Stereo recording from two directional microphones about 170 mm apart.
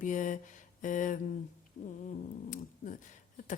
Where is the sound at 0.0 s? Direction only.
45° left (ahead or behind).